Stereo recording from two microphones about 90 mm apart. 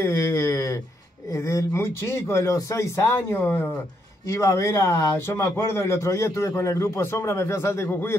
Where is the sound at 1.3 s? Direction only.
35° left (ahead or behind).